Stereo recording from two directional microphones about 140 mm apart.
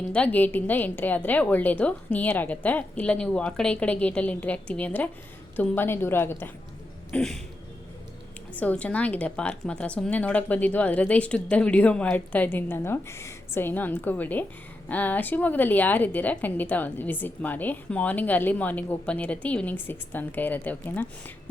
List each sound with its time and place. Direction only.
0.1 s a woman's voice: 10° left (ahead or behind)
7.1 s a sound: 5° left (ahead or behind)
8.5 s a woman's voice: 10° left (ahead or behind)